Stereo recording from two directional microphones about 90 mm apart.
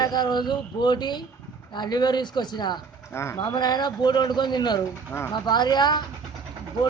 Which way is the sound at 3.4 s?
50° left (ahead or behind).